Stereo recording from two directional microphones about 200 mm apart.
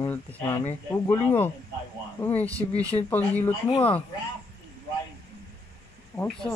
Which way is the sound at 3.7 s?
30° left (ahead or behind).